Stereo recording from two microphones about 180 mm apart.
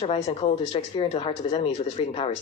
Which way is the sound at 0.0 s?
30° left (ahead or behind).